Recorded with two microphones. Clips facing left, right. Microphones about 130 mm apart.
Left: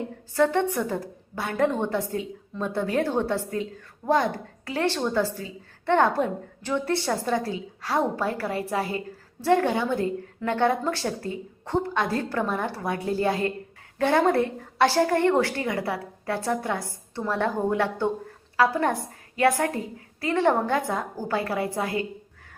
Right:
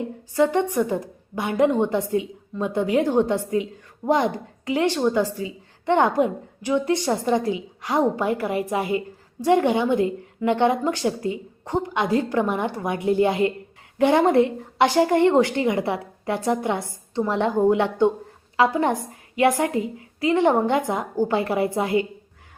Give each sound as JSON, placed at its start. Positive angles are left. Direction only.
{"t": 0.3, "sound": "a woman's voice", "side_deg": -15}